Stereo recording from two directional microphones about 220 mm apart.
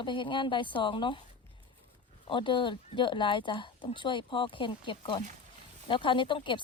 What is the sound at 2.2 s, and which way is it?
Speech, 20° left (ahead or behind).